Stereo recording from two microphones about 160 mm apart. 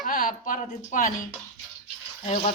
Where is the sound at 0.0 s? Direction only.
60° left (ahead or behind).